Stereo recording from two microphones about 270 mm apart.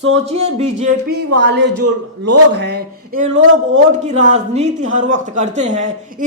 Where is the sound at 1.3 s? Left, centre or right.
Right.